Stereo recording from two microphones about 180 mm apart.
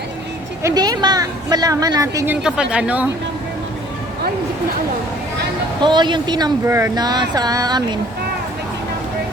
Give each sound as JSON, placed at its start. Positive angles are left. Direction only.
{"t": 0.6, "sound": "speech", "side_deg": -20}
{"t": 5.8, "sound": "speech", "side_deg": -25}